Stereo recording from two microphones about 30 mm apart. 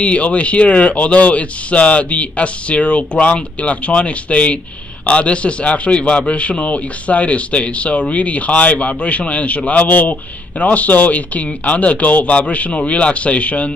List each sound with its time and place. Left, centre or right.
0.0 s a man's voice: left
9.7 s a man's voice: left